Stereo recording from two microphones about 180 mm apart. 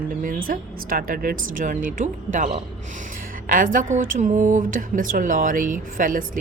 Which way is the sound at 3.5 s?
50° right (ahead or behind).